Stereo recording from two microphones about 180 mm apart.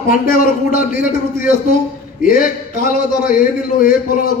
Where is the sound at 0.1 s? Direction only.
50° left (ahead or behind).